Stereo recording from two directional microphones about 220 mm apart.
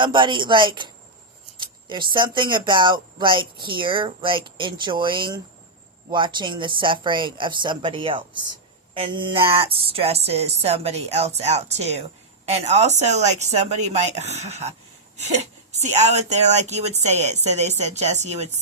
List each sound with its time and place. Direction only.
0.0 s speech: 20° right (ahead or behind)